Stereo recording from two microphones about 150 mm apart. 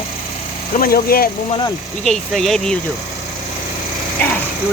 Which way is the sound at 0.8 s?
85° left.